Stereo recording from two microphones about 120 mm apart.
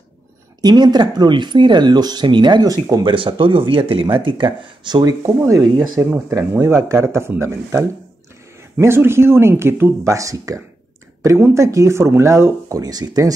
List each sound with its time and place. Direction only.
0.6 s speech: 35° right (ahead or behind)
5.2 s speech: 25° right (ahead or behind)